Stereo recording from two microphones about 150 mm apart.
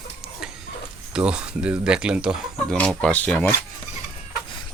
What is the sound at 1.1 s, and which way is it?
Speech, 5° right (ahead or behind).